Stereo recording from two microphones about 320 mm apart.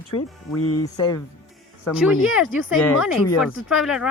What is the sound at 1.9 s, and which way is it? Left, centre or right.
Speech, centre.